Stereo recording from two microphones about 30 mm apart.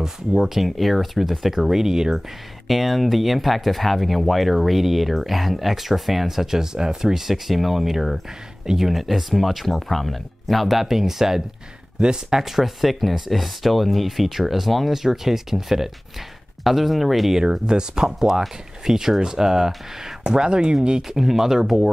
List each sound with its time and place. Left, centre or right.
0.6 s speech: centre
2.7 s speech: centre
15.0 s speech: centre
17.4 s speech: right
20.2 s speech: right
21.1 s speech: centre